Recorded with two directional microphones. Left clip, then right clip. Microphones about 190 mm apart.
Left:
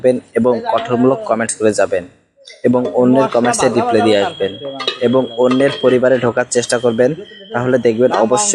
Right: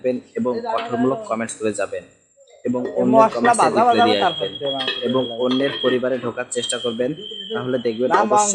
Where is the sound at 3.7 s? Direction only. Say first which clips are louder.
Left 1 dB; centre (ahead or behind).